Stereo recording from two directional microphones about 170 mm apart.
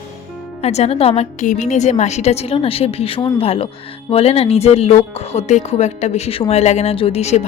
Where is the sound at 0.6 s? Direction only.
40° left (ahead or behind).